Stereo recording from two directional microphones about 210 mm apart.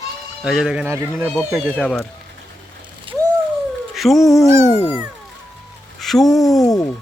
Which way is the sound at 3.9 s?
Centre (ahead or behind).